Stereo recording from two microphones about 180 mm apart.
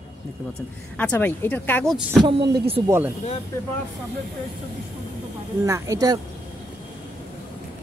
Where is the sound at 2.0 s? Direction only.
5° right (ahead or behind).